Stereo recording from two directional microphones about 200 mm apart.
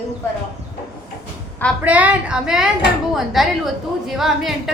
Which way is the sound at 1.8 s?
5° right (ahead or behind).